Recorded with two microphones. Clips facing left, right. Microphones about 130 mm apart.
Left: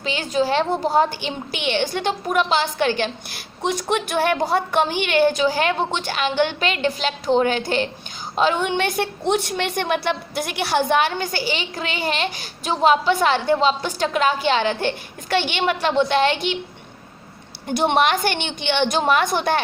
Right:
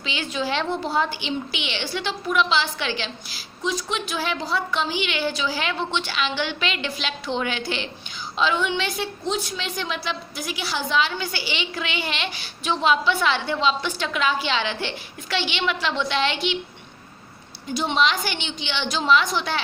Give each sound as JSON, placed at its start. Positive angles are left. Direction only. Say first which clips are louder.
{"t": 0.0, "sound": "a woman's voice", "louder": "left 6 dB", "side_deg": 45}
{"t": 17.7, "sound": "a woman's voice", "louder": "left 4 dB", "side_deg": 60}